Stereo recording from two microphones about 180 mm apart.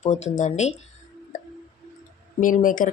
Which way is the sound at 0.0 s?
40° left (ahead or behind).